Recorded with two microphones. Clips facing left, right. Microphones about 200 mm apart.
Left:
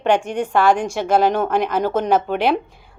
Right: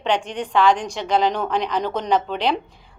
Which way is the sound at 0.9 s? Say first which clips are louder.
Left 4 dB; 50° left (ahead or behind).